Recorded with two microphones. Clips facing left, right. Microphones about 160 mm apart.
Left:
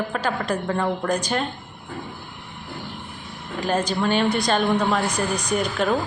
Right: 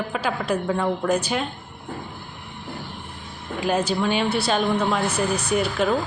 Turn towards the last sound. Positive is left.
turn(degrees=-5)  # may be behind; listen again after turning